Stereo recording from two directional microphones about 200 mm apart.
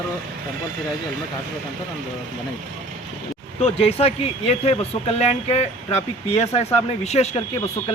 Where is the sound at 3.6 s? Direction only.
30° left (ahead or behind).